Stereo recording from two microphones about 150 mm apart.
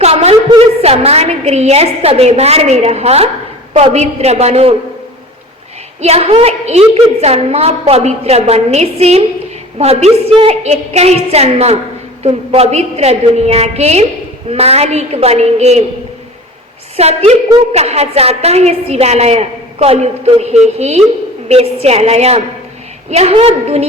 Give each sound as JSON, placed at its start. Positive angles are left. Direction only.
{"t": 0.0, "sound": "a sound", "side_deg": -45}
{"t": 0.8, "sound": "a woman's voice", "side_deg": -40}
{"t": 6.0, "sound": "a woman's voice", "side_deg": -45}
{"t": 17.0, "sound": "a woman's voice", "side_deg": -45}